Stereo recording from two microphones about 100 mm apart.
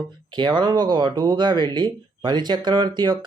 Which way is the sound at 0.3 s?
50° right (ahead or behind).